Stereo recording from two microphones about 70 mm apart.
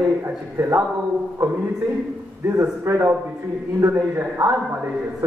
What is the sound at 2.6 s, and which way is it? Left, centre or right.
Speech, right.